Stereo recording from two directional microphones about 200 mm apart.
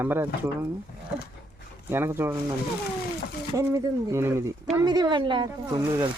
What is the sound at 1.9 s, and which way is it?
Speech, 10° right (ahead or behind).